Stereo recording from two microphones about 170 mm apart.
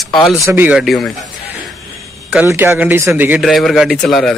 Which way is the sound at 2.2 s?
10° right (ahead or behind).